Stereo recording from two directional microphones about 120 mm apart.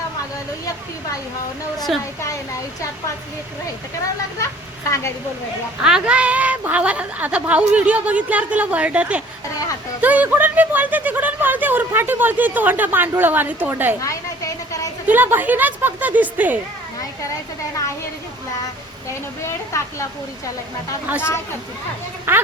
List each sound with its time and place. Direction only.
5.8 s speech: 10° right (ahead or behind)
14.0 s a sound: 25° left (ahead or behind)
15.0 s speech: 15° right (ahead or behind)
19.5 s speech: 25° left (ahead or behind)
21.2 s speech: 20° left (ahead or behind)
22.3 s speech: 20° right (ahead or behind)